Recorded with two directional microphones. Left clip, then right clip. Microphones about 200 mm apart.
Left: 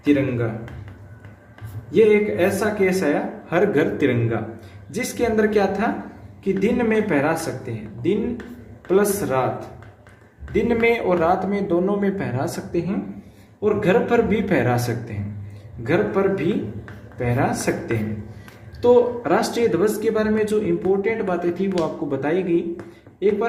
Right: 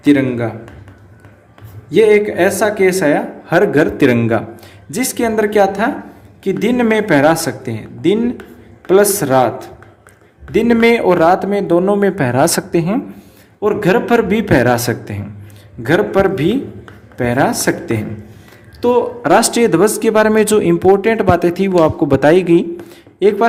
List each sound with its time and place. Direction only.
0.0 s a man's voice: 55° right (ahead or behind)
1.9 s speech: 55° right (ahead or behind)